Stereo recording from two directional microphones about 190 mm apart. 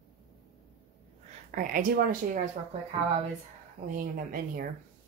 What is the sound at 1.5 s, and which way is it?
Speech, 50° right (ahead or behind).